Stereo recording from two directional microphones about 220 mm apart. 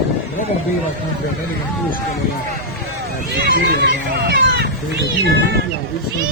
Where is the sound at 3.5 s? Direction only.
50° right (ahead or behind).